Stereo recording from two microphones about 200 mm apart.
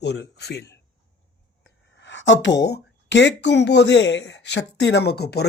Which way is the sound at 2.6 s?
60° left (ahead or behind).